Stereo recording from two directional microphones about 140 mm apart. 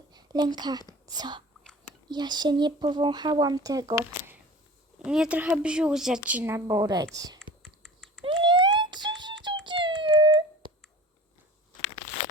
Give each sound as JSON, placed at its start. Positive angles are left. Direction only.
{"t": 0.1, "sound": "speech", "side_deg": -30}
{"t": 5.0, "sound": "speech", "side_deg": -5}
{"t": 7.3, "sound": "typing", "side_deg": 5}
{"t": 8.2, "sound": "a sound", "side_deg": -40}